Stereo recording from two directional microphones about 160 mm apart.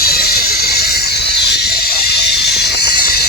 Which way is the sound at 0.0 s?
75° left (ahead or behind).